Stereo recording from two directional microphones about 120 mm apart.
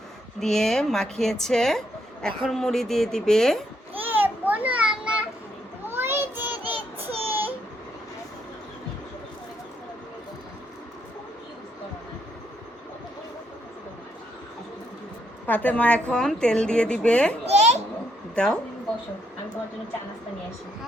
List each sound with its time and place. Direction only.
0.3 s a woman's voice: 5° left (ahead or behind)
3.9 s a sound: 15° right (ahead or behind)
5.9 s child singing: 20° right (ahead or behind)
7.3 s baby cry: 15° right (ahead or behind)
15.4 s a woman's voice: 15° left (ahead or behind)
17.4 s babbling: 65° right (ahead or behind)
18.3 s a woman's voice: 10° left (ahead or behind)